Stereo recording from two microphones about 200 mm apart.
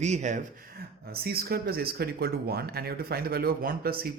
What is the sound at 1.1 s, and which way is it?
Speech, 50° right (ahead or behind).